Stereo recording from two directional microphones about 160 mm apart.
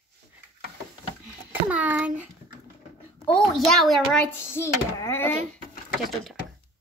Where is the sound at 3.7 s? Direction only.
Centre (ahead or behind).